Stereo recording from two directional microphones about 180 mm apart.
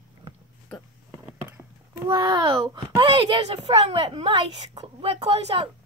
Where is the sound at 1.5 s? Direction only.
15° right (ahead or behind).